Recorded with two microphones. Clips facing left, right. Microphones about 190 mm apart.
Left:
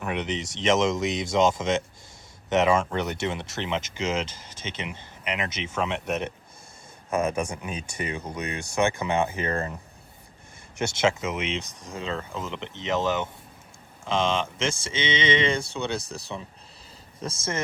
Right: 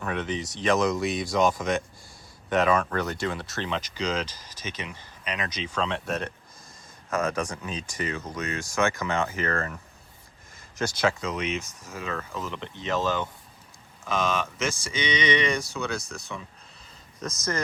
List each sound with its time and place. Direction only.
0.0 s speech: 20° left (ahead or behind)
10.8 s speech: 25° left (ahead or behind)